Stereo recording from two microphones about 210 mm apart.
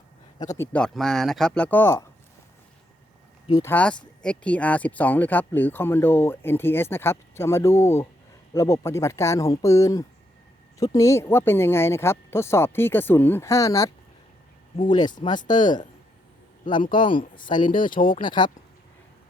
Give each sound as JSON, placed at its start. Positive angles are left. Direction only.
{"t": 0.6, "sound": "speech", "side_deg": 5}
{"t": 3.6, "sound": "speech", "side_deg": 10}